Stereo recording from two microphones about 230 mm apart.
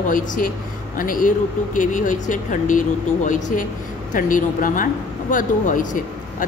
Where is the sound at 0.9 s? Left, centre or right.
Left.